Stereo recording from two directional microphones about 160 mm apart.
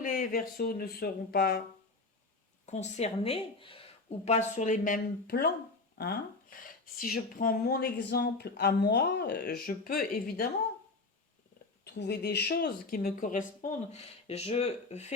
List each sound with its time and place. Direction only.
0.0 s speech: 60° left (ahead or behind); by 1.6 s 75° left (ahead or behind)
2.6 s speech: 45° left (ahead or behind)
4.3 s speech: 45° left (ahead or behind); by 10.5 s 65° left (ahead or behind)
11.9 s speech: 90° left; by 15.0 s 40° left (ahead or behind)